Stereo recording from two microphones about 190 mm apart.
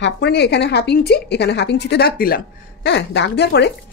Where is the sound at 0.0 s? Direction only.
60° left (ahead or behind).